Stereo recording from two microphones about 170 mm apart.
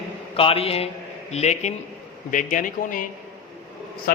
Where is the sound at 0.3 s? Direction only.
35° left (ahead or behind); by 3.0 s 50° left (ahead or behind).